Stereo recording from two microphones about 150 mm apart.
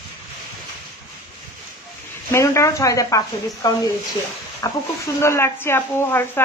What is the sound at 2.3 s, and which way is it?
A woman's voice, 20° left (ahead or behind).